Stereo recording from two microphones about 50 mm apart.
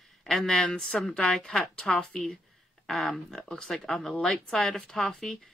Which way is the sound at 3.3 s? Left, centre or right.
Centre.